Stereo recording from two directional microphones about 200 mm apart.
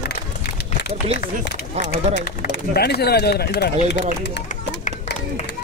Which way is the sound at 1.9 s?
50° left (ahead or behind).